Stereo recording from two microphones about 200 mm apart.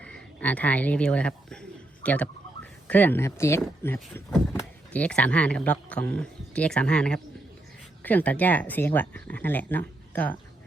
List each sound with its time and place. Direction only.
0.0 s speech: 5° left (ahead or behind)